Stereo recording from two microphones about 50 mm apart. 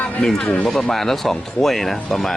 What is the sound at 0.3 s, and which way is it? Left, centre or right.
Speech, centre.